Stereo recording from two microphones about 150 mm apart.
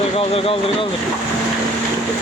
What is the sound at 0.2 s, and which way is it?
Speech, 40° left (ahead or behind).